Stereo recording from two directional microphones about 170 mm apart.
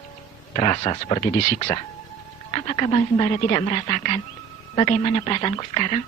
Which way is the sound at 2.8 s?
30° left (ahead or behind).